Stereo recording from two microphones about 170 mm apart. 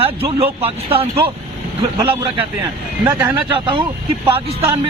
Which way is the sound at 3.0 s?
15° right (ahead or behind).